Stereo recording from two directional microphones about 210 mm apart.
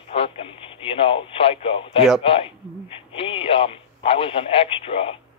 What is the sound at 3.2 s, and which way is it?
Speech, 25° left (ahead or behind).